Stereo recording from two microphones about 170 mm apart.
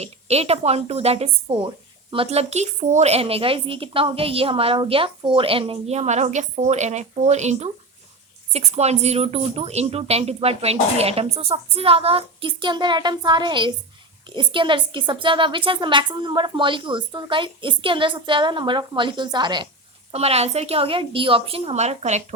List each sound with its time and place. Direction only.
0.0 s a woman's voice: 40° right (ahead or behind)
20.1 s speech: 35° right (ahead or behind)